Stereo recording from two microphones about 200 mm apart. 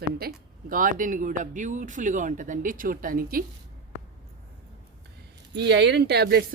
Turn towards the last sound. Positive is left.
turn(degrees=-50)  # may be behind; listen again after turning